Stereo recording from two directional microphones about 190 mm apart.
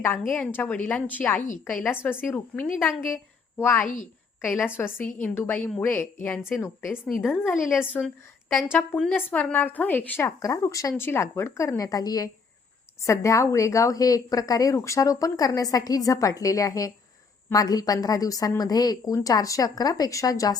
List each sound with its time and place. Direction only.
0.3 s a woman's voice: 10° left (ahead or behind)
3.8 s a woman's voice: 40° left (ahead or behind)
4.4 s a woman's voice: 10° left (ahead or behind)
7.4 s a woman's voice: 10° left (ahead or behind)